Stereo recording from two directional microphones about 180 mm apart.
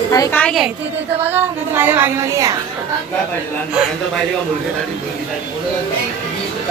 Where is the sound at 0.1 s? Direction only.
20° left (ahead or behind).